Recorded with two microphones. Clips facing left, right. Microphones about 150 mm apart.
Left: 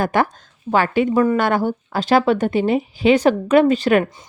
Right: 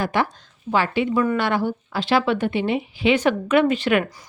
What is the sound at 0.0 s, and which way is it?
A woman's voice, 45° left (ahead or behind).